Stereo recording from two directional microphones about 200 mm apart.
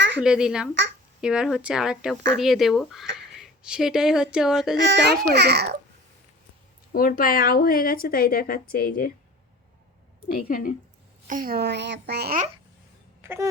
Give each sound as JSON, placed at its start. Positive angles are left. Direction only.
{"t": 0.2, "sound": "speech", "side_deg": -5}
{"t": 4.8, "sound": "a child's voice", "side_deg": -60}
{"t": 6.9, "sound": "a woman's voice", "side_deg": 45}
{"t": 10.2, "sound": "a woman's voice", "side_deg": 45}
{"t": 11.3, "sound": "a child's voice", "side_deg": -45}
{"t": 13.2, "sound": "speech", "side_deg": -10}